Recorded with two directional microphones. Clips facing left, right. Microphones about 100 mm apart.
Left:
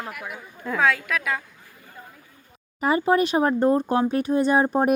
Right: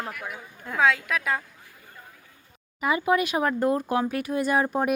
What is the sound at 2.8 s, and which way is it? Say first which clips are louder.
Speech: left 3 dB; 40° left (ahead or behind).